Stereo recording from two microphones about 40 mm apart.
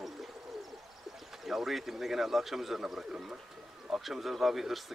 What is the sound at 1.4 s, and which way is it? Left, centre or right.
A man's voice, centre.